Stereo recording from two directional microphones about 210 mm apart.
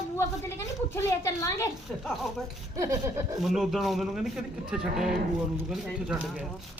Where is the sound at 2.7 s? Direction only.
15° right (ahead or behind).